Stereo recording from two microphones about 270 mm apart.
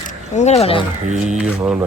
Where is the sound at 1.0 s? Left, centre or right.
Right.